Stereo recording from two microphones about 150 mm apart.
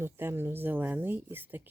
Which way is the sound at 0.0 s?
15° right (ahead or behind).